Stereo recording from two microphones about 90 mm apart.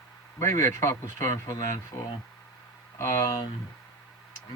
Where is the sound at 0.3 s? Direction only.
35° left (ahead or behind).